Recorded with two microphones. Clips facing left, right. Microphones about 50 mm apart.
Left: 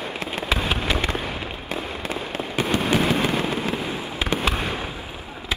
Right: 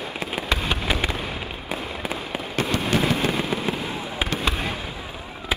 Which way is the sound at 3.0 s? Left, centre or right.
Left.